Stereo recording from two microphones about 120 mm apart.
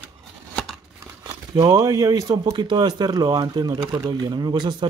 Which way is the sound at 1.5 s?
35° right (ahead or behind).